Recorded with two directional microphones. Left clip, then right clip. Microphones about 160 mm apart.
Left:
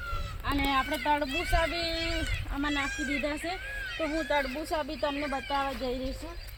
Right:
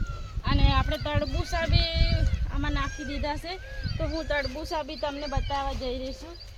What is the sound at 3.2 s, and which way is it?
Speech, 30° right (ahead or behind).